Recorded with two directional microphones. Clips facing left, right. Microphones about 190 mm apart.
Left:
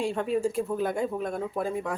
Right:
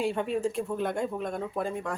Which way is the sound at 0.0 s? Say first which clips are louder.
Left 1 dB; centre (ahead or behind).